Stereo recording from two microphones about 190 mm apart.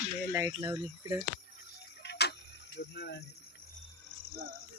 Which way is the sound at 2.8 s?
60° left (ahead or behind).